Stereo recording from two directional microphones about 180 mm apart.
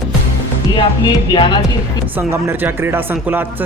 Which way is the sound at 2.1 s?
10° right (ahead or behind).